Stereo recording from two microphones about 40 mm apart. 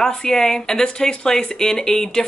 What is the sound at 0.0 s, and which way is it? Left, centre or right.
Speech, centre.